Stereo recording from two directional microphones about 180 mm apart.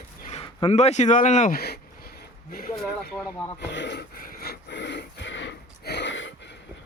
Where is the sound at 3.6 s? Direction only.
75° left (ahead or behind).